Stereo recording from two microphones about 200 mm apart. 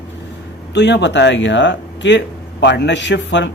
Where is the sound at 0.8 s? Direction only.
60° left (ahead or behind).